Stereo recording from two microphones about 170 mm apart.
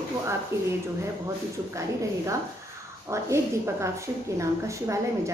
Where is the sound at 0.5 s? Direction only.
15° right (ahead or behind).